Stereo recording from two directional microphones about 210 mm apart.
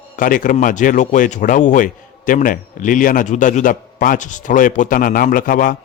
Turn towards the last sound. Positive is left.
turn(degrees=40)  # may be behind; listen again after turning